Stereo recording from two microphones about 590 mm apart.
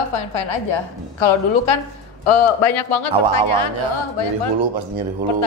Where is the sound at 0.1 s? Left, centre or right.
Left.